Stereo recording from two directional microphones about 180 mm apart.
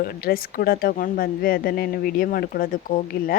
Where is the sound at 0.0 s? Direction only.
55° left (ahead or behind).